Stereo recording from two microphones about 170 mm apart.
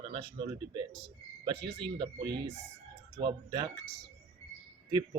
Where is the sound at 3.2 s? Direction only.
25° right (ahead or behind).